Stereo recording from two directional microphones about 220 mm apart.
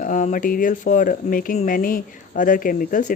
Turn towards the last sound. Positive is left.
turn(degrees=35)  # may be behind; listen again after turning